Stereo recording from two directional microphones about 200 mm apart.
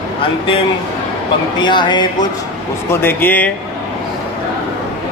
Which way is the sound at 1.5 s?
25° left (ahead or behind).